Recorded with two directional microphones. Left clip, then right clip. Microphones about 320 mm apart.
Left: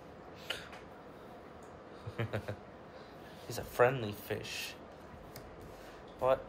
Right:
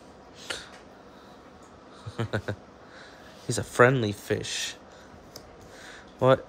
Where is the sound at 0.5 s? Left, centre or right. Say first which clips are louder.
Right 5 dB; centre.